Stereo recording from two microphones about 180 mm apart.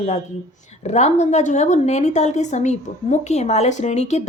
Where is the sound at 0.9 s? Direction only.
40° left (ahead or behind).